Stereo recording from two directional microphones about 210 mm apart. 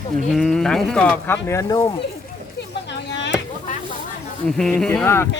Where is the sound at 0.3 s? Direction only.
Centre (ahead or behind).